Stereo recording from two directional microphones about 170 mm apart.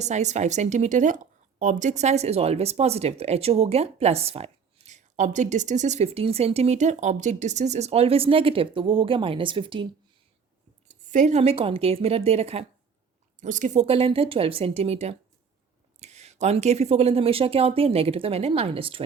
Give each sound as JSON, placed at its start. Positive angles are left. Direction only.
{"t": 0.0, "sound": "speech", "side_deg": -45}
{"t": 10.8, "sound": "speech", "side_deg": -45}